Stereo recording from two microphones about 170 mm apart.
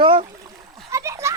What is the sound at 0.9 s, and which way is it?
Splash, 15° right (ahead or behind).